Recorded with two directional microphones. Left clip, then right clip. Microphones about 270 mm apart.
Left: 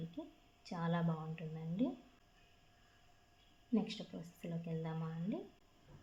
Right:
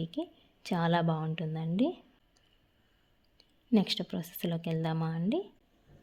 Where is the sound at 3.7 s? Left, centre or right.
Right.